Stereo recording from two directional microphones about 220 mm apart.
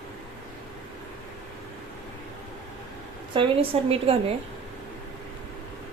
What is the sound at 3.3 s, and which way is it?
Speech, 25° right (ahead or behind).